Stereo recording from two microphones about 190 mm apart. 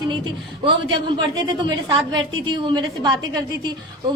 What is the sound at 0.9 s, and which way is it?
A woman's voice, 25° right (ahead or behind).